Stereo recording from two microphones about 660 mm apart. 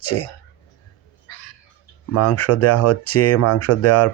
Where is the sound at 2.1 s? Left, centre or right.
Left.